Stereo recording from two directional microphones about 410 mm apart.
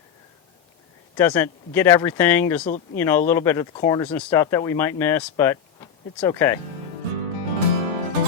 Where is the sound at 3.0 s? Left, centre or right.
Centre.